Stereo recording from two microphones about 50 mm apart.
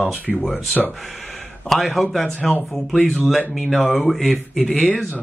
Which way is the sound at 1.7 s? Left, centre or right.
Centre.